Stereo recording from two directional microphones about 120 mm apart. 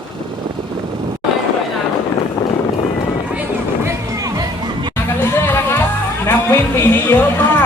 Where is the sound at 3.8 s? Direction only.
30° right (ahead or behind).